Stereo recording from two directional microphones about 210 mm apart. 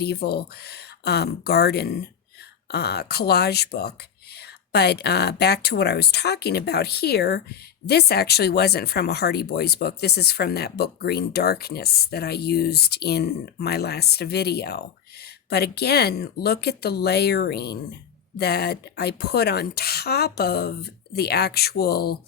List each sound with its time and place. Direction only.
0.0 s speech: 50° left (ahead or behind)